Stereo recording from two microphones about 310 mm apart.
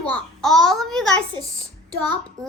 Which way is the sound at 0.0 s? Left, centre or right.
Centre.